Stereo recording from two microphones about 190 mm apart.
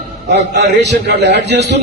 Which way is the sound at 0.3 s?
65° right (ahead or behind).